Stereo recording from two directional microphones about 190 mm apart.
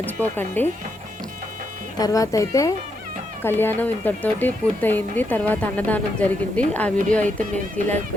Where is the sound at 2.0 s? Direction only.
20° left (ahead or behind).